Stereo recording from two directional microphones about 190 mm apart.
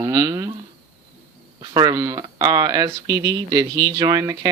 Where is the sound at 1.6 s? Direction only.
20° right (ahead or behind).